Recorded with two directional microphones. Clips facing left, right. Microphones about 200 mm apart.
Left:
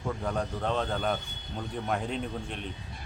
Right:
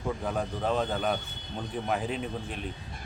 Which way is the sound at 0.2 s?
5° right (ahead or behind).